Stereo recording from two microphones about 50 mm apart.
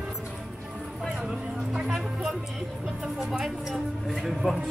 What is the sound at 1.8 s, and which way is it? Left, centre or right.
Speech, centre.